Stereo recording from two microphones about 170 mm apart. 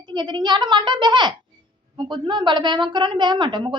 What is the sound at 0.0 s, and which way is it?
A woman's voice, 25° right (ahead or behind).